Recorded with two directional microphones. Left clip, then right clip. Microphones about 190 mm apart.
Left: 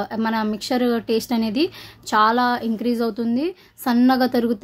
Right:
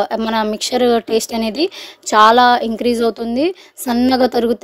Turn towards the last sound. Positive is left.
turn(degrees=-35)  # may be behind; listen again after turning